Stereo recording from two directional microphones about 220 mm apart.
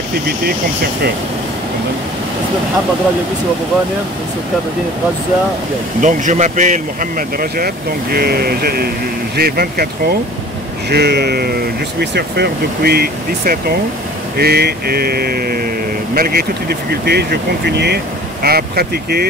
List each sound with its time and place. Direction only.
5.9 s speech: 35° right (ahead or behind)